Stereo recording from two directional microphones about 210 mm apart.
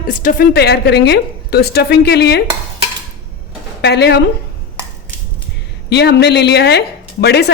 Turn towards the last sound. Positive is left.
turn(degrees=50)  # may be behind; listen again after turning